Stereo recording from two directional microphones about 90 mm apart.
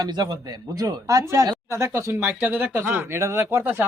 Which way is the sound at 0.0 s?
45° right (ahead or behind).